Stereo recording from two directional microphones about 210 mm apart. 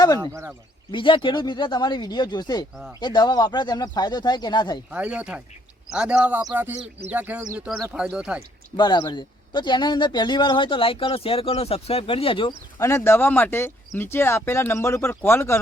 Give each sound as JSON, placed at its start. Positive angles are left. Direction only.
{"t": 0.2, "sound": "speech", "side_deg": -15}
{"t": 0.9, "sound": "speech", "side_deg": 25}
{"t": 4.9, "sound": "speech", "side_deg": -5}
{"t": 8.7, "sound": "speech", "side_deg": 20}